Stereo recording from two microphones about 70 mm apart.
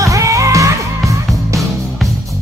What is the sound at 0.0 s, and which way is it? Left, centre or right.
Music, right.